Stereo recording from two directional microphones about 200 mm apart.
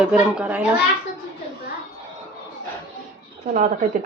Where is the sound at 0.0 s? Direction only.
5° right (ahead or behind).